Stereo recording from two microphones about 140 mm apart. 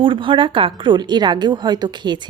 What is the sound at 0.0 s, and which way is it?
A woman's voice, 35° right (ahead or behind).